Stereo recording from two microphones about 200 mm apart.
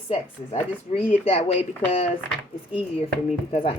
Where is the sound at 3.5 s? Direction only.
25° left (ahead or behind).